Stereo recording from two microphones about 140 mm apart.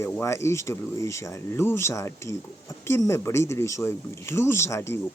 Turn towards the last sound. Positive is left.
turn(degrees=20)  # may be behind; listen again after turning